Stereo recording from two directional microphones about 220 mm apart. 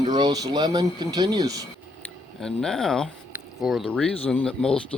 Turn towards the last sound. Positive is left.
turn(degrees=5)  # may be behind; listen again after turning